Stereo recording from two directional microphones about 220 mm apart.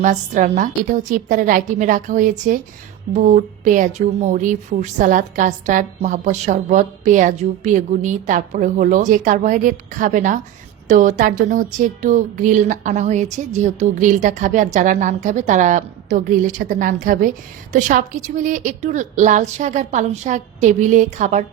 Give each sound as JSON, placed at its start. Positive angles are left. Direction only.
{"t": 0.0, "sound": "a woman's voice", "side_deg": -35}